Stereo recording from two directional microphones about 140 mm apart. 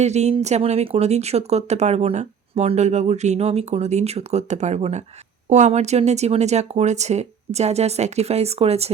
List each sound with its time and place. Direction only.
0.0 s speech: 50° right (ahead or behind)